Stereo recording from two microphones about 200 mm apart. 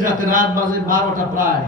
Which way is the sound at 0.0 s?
45° right (ahead or behind).